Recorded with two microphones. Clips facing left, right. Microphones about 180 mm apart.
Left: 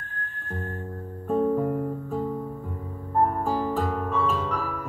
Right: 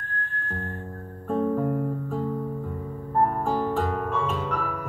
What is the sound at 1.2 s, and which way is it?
Music, 5° left (ahead or behind).